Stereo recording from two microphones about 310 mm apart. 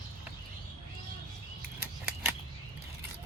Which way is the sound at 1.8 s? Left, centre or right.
Centre.